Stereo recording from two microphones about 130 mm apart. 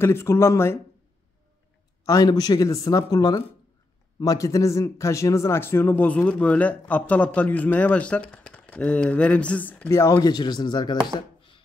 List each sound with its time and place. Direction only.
0.0 s speech: 20° left (ahead or behind)
2.0 s a man's voice: 30° left (ahead or behind)